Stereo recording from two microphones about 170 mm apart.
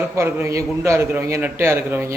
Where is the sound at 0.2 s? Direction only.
15° right (ahead or behind).